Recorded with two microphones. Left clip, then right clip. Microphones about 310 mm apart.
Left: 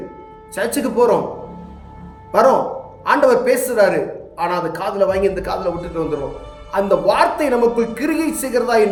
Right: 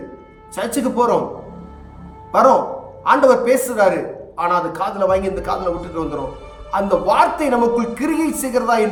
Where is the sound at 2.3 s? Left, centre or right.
Centre.